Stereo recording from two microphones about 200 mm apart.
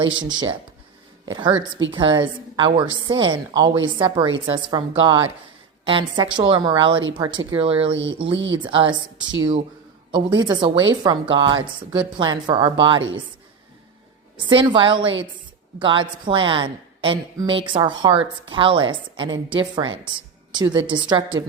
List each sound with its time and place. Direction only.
0.2 s a woman's voice: 20° right (ahead or behind)
14.5 s a woman's voice: 25° right (ahead or behind)